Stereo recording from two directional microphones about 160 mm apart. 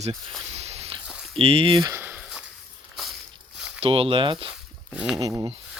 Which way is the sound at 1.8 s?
15° right (ahead or behind).